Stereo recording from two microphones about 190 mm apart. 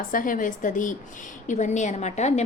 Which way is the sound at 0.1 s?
45° left (ahead or behind).